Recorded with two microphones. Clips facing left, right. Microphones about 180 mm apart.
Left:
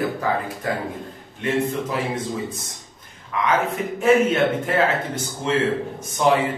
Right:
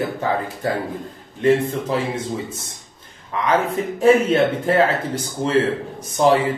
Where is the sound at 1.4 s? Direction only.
30° right (ahead or behind).